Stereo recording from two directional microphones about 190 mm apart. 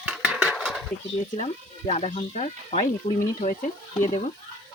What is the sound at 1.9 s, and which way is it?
Speech, 35° left (ahead or behind).